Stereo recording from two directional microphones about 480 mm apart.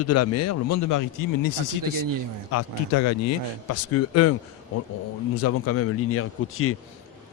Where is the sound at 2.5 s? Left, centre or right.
Left.